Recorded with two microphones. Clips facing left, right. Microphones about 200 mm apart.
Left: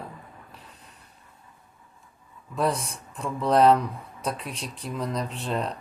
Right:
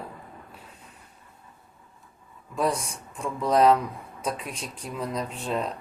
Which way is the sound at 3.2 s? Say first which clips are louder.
Left 1 dB; centre (ahead or behind).